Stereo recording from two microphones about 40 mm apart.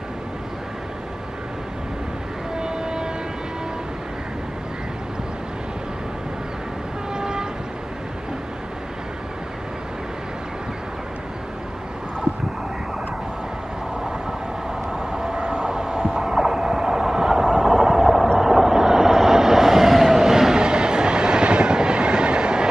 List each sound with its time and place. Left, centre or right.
2.5 s a sound: centre
7.2 s train: centre
15.2 s vehicle: right
15.7 s heart sounds: right
16.0 s heart murmur: centre
18.4 s vehicle: centre